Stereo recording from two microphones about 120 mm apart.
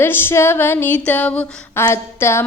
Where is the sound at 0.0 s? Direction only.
20° left (ahead or behind).